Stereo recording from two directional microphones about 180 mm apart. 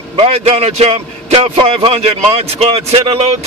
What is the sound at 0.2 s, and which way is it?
A man's voice, 35° right (ahead or behind).